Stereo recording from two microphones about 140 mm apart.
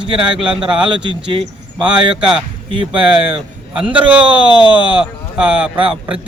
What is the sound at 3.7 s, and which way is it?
Speech, 10° right (ahead or behind).